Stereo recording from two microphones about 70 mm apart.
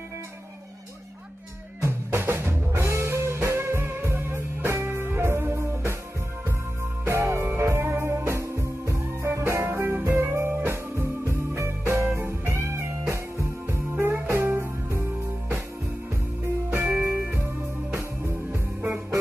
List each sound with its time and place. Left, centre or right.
2.0 s music: right
7.1 s music: right
16.9 s music: centre
17.9 s music: right